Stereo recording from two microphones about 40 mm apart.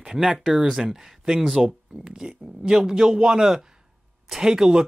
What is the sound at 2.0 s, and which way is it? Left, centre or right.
A man's voice, centre.